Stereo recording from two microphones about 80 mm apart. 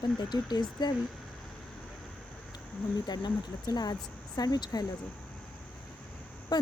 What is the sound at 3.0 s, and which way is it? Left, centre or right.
Speech, left.